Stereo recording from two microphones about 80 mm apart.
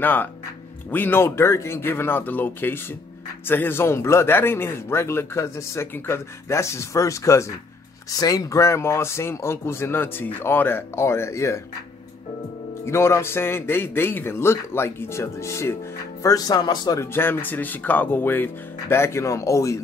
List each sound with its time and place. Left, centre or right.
0.0 s speech: left
8.1 s speech: left
12.8 s speech: left
16.2 s speech: left
17.0 s speech: left